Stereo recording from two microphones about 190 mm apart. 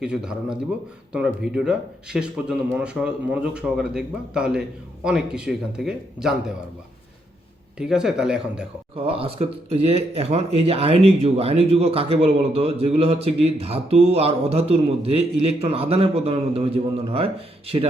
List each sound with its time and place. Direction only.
0.0 s speech: 5° right (ahead or behind)
7.8 s speech: 5° right (ahead or behind)
9.0 s speech: 30° right (ahead or behind)